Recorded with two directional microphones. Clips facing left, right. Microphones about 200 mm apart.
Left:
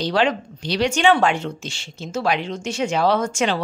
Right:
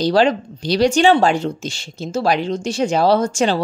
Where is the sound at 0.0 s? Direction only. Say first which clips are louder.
Right 5 dB; 35° right (ahead or behind).